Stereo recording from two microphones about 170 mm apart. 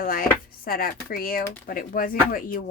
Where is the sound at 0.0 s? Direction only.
60° left (ahead or behind).